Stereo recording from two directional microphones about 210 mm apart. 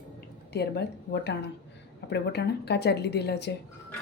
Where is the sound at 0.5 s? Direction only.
55° left (ahead or behind).